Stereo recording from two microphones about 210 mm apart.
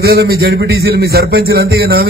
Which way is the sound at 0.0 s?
50° right (ahead or behind).